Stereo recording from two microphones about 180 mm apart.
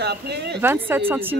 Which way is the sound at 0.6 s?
10° right (ahead or behind).